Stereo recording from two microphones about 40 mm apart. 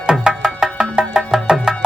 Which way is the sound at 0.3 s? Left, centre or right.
Centre.